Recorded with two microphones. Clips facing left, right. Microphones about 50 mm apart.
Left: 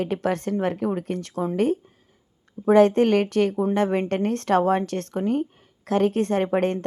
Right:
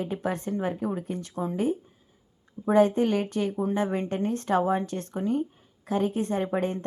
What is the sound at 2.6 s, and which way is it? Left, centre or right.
Speech, left.